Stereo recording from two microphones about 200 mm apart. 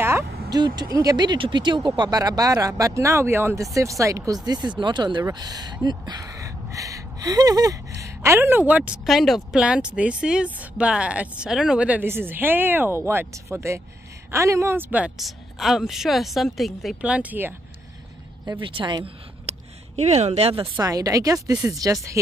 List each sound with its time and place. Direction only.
0.0 s vehicle: 15° right (ahead or behind)
0.9 s a woman's voice: 20° right (ahead or behind)
18.4 s speech: 20° right (ahead or behind)
20.7 s speech: 15° right (ahead or behind)